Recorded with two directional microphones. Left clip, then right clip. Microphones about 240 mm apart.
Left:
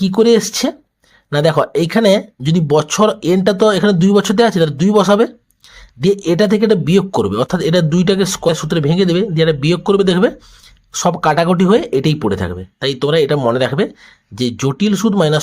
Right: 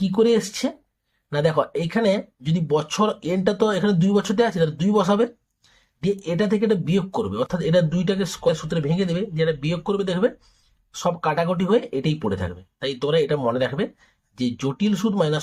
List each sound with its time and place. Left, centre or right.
0.0 s speech: left